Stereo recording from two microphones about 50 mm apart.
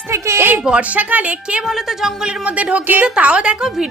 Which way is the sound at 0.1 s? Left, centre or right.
Right.